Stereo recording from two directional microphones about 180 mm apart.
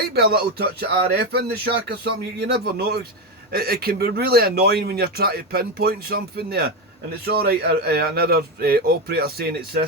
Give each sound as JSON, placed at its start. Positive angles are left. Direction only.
{"t": 0.1, "sound": "speech", "side_deg": -60}